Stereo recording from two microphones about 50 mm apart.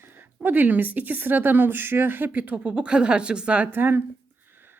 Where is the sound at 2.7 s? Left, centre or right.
Centre.